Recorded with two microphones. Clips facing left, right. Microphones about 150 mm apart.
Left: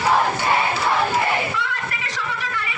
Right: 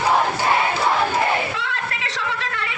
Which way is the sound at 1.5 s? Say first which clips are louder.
Left 1 dB; 75° right (ahead or behind).